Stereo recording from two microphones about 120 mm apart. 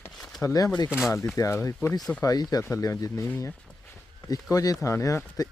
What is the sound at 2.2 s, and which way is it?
Speech, 35° left (ahead or behind).